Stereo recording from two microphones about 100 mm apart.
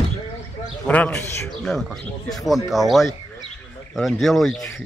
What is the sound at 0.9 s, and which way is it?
Speech, 15° left (ahead or behind).